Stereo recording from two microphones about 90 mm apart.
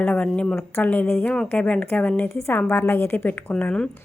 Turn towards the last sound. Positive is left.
turn(degrees=10)  # may be behind; listen again after turning